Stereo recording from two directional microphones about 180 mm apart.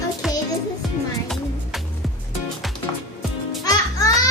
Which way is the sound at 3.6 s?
20° left (ahead or behind).